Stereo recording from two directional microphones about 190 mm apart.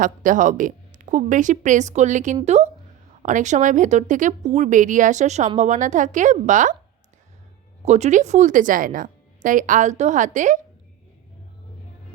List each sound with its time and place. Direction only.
0.0 s speech: 45° right (ahead or behind)
7.8 s speech: 35° right (ahead or behind)